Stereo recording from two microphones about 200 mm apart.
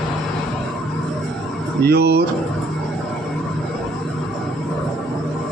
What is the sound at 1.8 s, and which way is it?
Speech, 55° right (ahead or behind).